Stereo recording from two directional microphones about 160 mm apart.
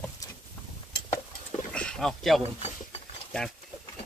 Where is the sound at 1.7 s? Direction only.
5° left (ahead or behind).